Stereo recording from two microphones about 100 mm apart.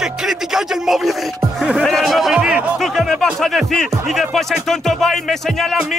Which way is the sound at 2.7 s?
Centre (ahead or behind).